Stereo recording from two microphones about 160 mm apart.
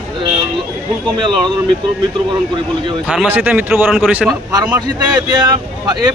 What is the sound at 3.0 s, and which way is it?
Speech, 5° right (ahead or behind).